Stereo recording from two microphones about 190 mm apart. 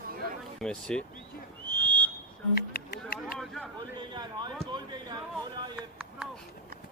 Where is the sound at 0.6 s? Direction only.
5° left (ahead or behind).